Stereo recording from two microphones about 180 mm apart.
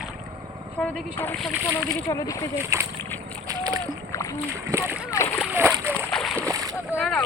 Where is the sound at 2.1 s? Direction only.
20° left (ahead or behind).